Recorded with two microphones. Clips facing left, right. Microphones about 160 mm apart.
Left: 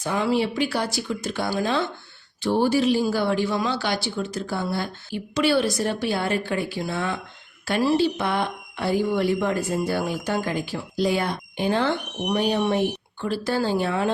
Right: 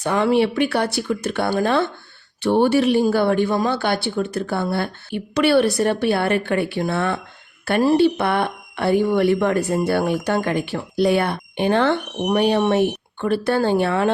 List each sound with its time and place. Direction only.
0.0 s a man's voice: 60° right (ahead or behind)
7.6 s a man's voice: 50° right (ahead or behind)